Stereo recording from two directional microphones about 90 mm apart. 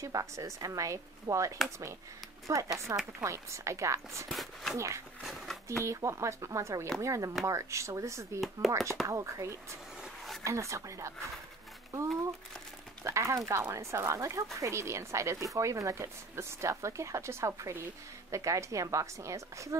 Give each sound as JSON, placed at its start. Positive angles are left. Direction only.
{"t": 0.0, "sound": "speech", "side_deg": -40}
{"t": 4.3, "sound": "speech", "side_deg": 0}
{"t": 4.7, "sound": "speech", "side_deg": -35}
{"t": 5.2, "sound": "a sound", "side_deg": 0}
{"t": 5.9, "sound": "speech", "side_deg": -35}
{"t": 8.4, "sound": "speech", "side_deg": 0}
{"t": 9.0, "sound": "speech", "side_deg": -35}